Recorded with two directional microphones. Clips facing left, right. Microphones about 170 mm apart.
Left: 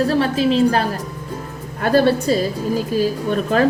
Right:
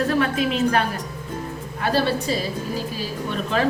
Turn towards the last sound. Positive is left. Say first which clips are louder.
# left 6 dB
turn(degrees=45)  # may be behind; listen again after turning